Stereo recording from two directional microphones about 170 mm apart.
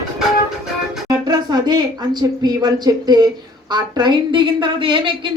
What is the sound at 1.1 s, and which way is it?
Speech, 20° right (ahead or behind).